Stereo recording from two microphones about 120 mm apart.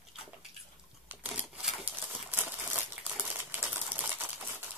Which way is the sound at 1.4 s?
Centre (ahead or behind).